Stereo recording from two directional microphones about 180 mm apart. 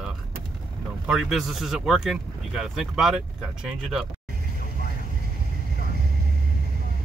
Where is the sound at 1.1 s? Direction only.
Centre (ahead or behind).